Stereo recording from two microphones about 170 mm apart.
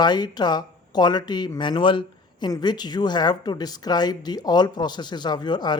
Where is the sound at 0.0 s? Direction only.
25° left (ahead or behind).